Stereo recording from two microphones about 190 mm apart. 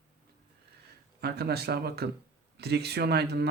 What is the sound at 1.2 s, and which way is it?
Speech, 55° right (ahead or behind).